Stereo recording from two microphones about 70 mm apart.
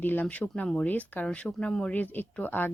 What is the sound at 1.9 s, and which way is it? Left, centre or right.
Speech, left.